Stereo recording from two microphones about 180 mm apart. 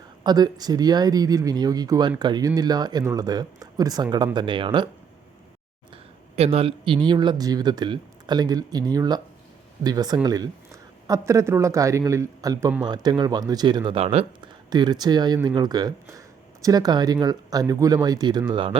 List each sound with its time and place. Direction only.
0.2 s speech: 25° right (ahead or behind)
6.3 s speech: 35° right (ahead or behind)